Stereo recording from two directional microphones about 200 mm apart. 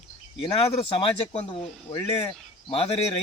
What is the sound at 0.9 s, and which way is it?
A man's voice, 25° left (ahead or behind).